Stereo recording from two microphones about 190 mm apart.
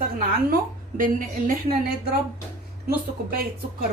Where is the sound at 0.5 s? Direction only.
45° right (ahead or behind).